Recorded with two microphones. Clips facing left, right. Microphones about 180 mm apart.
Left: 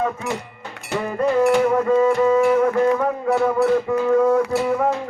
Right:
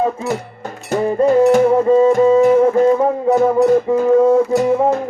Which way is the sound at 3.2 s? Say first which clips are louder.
Right 5 dB; 40° right (ahead or behind).